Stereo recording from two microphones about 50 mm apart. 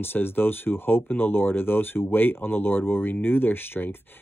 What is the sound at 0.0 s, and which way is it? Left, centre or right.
Speech, left.